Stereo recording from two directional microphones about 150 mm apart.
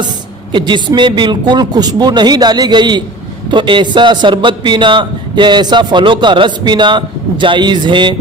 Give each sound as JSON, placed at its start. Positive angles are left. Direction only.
{"t": 0.5, "sound": "a man's voice", "side_deg": -30}